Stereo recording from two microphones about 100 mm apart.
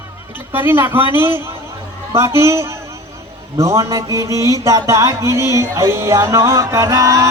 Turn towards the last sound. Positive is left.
turn(degrees=-30)  # may be behind; listen again after turning